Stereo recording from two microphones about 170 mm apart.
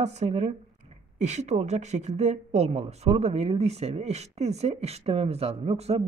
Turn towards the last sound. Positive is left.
turn(degrees=-40)  # may be behind; listen again after turning